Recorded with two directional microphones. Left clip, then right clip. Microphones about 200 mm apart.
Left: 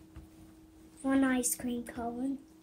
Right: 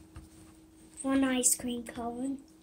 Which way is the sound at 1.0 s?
10° left (ahead or behind).